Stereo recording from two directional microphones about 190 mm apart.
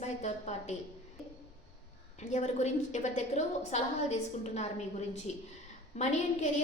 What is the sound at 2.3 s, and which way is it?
A woman's voice, 35° left (ahead or behind).